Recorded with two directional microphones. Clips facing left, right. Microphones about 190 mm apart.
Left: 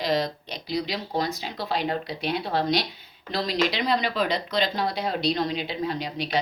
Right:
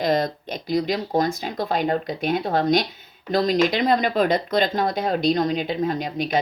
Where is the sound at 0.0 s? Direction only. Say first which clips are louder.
Right 4 dB; 50° right (ahead or behind).